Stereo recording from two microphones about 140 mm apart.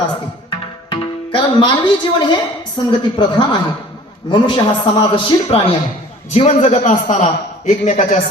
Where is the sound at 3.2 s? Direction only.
35° left (ahead or behind); by 8.2 s 65° left (ahead or behind).